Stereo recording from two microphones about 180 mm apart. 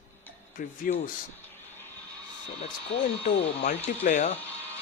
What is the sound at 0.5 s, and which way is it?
Speech, 45° left (ahead or behind).